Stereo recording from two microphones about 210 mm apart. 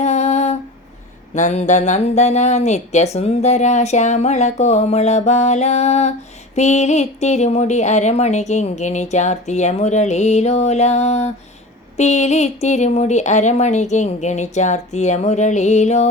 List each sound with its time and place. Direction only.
0.0 s humming: 30° left (ahead or behind)
1.3 s speech: 35° left (ahead or behind)